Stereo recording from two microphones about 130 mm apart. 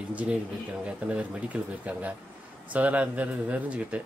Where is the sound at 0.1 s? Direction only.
10° right (ahead or behind).